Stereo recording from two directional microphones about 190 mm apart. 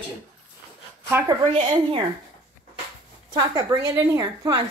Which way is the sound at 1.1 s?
10° right (ahead or behind).